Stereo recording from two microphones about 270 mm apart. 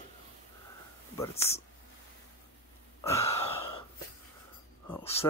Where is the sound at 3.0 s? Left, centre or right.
Centre.